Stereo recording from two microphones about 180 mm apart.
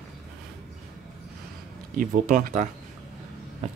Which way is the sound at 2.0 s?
50° right (ahead or behind).